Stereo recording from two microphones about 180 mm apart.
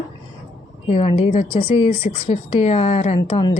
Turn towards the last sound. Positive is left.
turn(degrees=40)  # may be behind; listen again after turning